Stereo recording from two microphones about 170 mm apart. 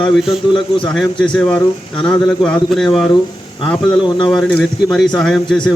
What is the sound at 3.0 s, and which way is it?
Speech, 30° left (ahead or behind).